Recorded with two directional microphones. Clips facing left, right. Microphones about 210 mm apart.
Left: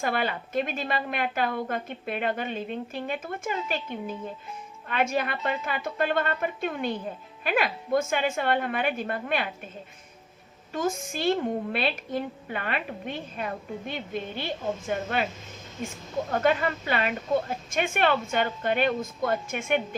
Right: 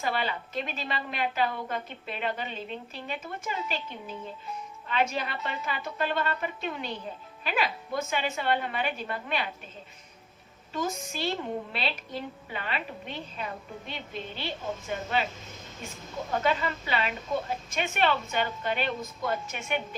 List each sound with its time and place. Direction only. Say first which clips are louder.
0.0 s a woman's voice: left 3 dB; 50° left (ahead or behind)
10.7 s a woman's voice: left 4 dB; 50° left (ahead or behind)
16.4 s a woman's voice: left 4 dB; 50° left (ahead or behind)